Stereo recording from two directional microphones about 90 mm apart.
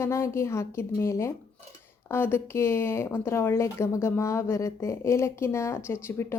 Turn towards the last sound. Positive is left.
turn(degrees=30)  # may be behind; listen again after turning